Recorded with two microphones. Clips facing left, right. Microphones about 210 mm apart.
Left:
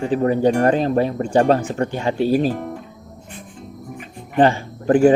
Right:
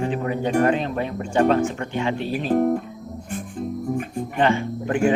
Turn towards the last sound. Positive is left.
turn(degrees=35)  # may be behind; listen again after turning